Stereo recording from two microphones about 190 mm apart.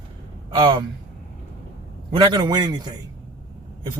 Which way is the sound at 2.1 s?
25° right (ahead or behind).